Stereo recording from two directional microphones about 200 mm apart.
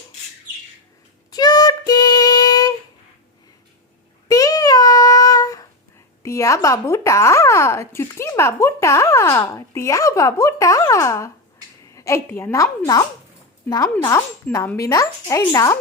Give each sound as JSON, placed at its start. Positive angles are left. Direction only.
{"t": 1.3, "sound": "child singing", "side_deg": 20}
{"t": 4.3, "sound": "child singing", "side_deg": 20}
{"t": 6.2, "sound": "a woman's voice", "side_deg": 15}